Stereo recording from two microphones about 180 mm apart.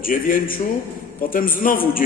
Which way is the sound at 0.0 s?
50° left (ahead or behind).